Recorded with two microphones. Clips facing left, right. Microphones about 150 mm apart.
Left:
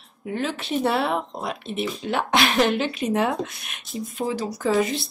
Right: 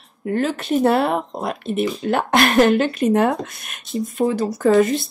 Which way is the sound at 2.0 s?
50° right (ahead or behind).